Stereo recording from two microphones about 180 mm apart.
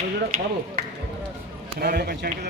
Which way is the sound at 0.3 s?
50° right (ahead or behind).